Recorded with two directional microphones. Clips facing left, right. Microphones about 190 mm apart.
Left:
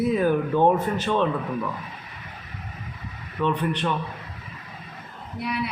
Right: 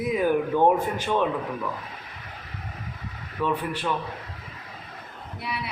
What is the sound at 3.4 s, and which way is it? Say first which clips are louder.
Speech: left 2 dB; 5° right (ahead or behind).